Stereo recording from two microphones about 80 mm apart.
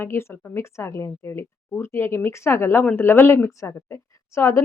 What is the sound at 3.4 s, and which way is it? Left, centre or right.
Speech, left.